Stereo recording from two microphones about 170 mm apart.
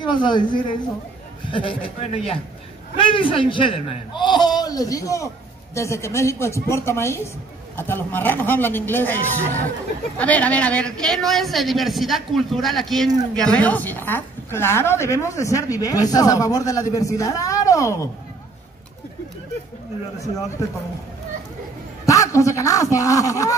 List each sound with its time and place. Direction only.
0.0 s a man's voice: 25° left (ahead or behind)
22.0 s a man's voice: 20° left (ahead or behind)